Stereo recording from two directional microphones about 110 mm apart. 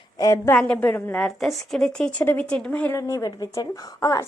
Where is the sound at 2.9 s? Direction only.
30° left (ahead or behind).